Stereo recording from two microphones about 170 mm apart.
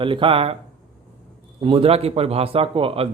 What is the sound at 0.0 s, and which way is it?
Speech, 30° right (ahead or behind).